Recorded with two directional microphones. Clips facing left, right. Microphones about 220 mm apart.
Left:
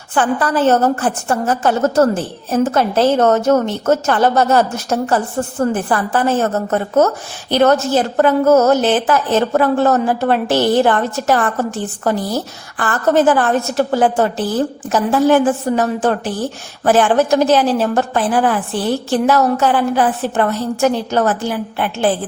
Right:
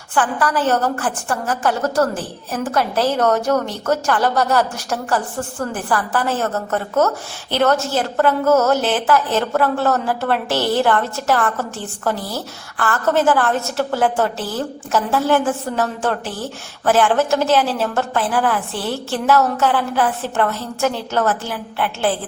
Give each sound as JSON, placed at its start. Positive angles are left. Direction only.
{"t": 0.1, "sound": "a woman's voice", "side_deg": 25}